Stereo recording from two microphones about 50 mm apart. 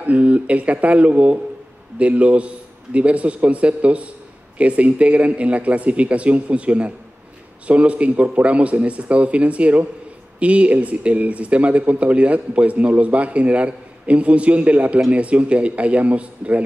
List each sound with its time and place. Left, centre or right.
0.0 s speech: right